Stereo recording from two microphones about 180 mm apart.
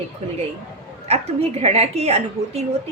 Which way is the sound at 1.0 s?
35° right (ahead or behind).